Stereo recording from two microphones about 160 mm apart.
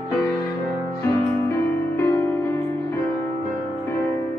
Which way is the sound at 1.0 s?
20° left (ahead or behind).